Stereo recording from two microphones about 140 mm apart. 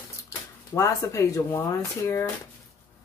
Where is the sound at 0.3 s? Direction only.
20° left (ahead or behind).